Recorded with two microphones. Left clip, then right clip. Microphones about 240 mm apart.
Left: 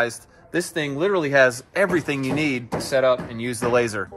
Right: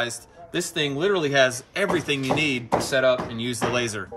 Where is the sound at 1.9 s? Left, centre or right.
Left.